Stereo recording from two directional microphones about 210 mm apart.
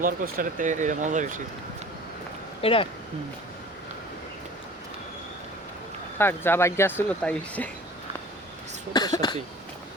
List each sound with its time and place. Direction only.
0.0 s speech: 40° right (ahead or behind)
2.6 s speech: 25° left (ahead or behind)
6.1 s speech: 10° left (ahead or behind)
8.9 s speech: 20° left (ahead or behind)